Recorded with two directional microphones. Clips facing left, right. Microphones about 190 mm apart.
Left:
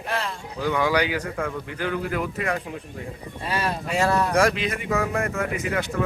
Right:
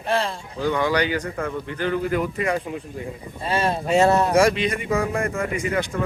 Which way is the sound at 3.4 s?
25° right (ahead or behind).